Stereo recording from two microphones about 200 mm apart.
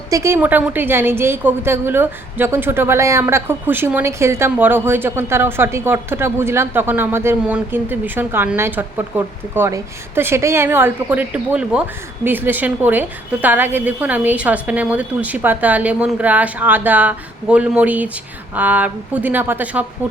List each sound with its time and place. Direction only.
0.1 s a woman's voice: 15° right (ahead or behind)